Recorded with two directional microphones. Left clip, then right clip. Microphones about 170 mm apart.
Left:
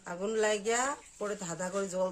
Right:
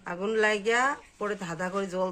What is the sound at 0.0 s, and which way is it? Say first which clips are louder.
Speech: right 5 dB; 10° left (ahead or behind).